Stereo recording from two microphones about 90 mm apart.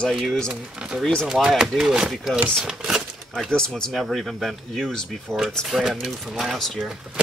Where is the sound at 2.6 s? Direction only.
5° right (ahead or behind).